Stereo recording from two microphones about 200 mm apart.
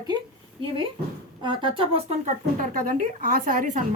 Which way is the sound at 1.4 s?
25° right (ahead or behind).